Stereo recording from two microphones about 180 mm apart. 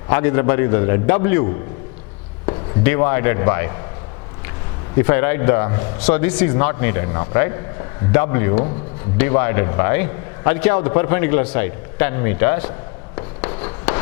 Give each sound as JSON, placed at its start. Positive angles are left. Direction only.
{"t": 0.1, "sound": "a man's voice", "side_deg": 15}
{"t": 2.5, "sound": "speech", "side_deg": 15}
{"t": 4.9, "sound": "a man's voice", "side_deg": 15}
{"t": 13.6, "sound": "a sound", "side_deg": 15}